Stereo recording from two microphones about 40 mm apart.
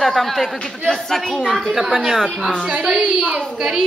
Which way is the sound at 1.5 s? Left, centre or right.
Centre.